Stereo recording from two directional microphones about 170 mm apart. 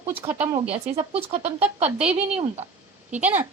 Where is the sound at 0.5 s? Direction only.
35° right (ahead or behind).